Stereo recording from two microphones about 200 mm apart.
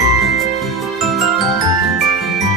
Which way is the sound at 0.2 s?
Centre (ahead or behind).